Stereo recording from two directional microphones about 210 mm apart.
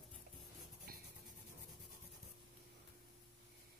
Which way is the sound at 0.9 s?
45° right (ahead or behind).